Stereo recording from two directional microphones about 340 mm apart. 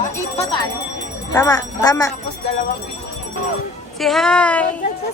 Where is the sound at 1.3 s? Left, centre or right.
Centre.